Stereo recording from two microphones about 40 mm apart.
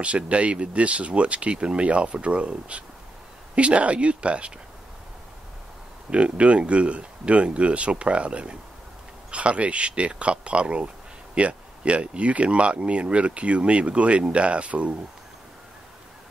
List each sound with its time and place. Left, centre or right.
0.0 s speech: right
6.0 s speech: right